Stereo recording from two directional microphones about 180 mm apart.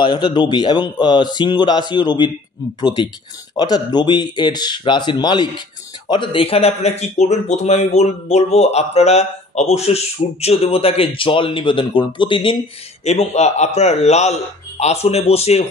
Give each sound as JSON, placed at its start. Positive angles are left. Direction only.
{"t": 0.0, "sound": "a man's voice", "side_deg": 25}